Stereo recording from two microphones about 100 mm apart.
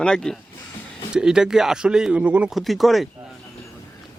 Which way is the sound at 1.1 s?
5° right (ahead or behind).